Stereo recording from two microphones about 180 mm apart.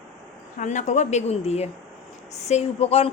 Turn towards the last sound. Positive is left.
turn(degrees=35)  # may be behind; listen again after turning